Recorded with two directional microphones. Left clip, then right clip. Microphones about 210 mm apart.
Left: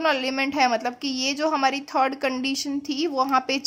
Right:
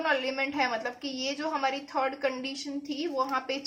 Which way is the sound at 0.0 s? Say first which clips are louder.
Left 5 dB; 50° left (ahead or behind).